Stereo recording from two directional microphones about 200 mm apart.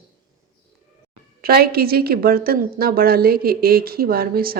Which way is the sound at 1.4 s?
50° right (ahead or behind).